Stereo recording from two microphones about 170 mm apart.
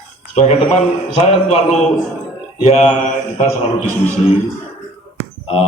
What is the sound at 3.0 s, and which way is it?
Mantra, 45° left (ahead or behind).